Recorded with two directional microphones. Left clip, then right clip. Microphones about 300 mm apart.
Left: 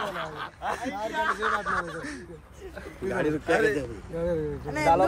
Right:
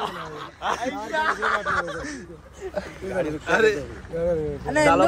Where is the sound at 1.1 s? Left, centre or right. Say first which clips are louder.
Right 4 dB; right.